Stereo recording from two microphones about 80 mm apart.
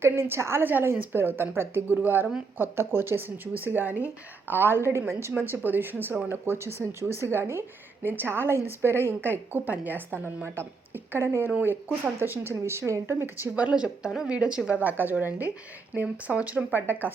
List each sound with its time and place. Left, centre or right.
0.0 s a woman's voice: right